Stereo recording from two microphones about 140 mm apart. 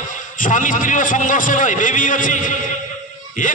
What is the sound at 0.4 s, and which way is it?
A man's voice, 70° left (ahead or behind).